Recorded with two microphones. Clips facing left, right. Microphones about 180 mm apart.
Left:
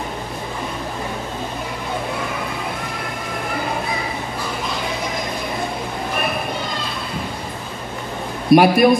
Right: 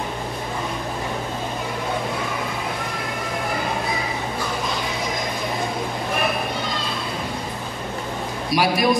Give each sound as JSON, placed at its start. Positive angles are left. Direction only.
{"t": 8.5, "sound": "a man's voice", "side_deg": 55}